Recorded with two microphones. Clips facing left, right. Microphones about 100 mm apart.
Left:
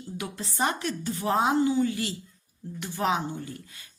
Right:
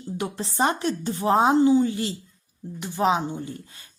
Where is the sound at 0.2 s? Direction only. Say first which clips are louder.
Right 5 dB; 30° right (ahead or behind).